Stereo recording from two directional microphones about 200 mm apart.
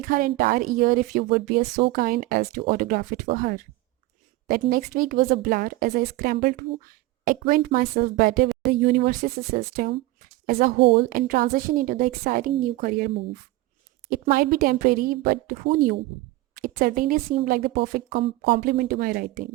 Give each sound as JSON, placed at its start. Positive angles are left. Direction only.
{"t": 0.0, "sound": "a woman's voice", "side_deg": -45}